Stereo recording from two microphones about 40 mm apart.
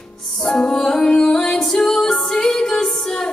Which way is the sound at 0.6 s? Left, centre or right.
Centre.